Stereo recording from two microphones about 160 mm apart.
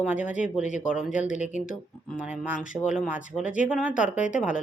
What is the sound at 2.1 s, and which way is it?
Speech, 10° right (ahead or behind).